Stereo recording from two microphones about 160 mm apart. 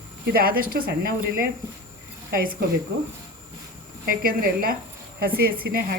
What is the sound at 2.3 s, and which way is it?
Speech, 60° right (ahead or behind).